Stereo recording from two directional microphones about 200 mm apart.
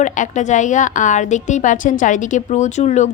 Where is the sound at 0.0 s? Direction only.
40° left (ahead or behind).